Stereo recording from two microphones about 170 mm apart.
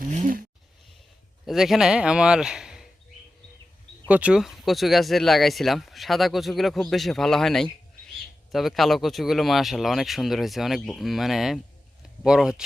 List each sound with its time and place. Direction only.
0.0 s a sound: 50° right (ahead or behind)
1.5 s a man's voice: centre (ahead or behind)
4.1 s speech: 5° right (ahead or behind)